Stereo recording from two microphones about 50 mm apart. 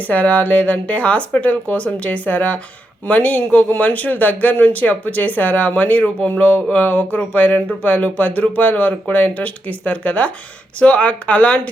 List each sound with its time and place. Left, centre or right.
0.0 s speech: left